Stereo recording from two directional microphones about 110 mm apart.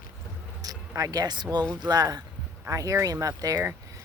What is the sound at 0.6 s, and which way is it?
Speech, 35° right (ahead or behind).